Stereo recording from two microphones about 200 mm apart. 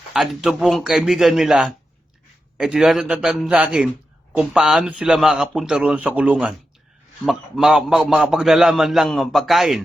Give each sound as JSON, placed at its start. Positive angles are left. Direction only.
{"t": 0.1, "sound": "a man's voice", "side_deg": 0}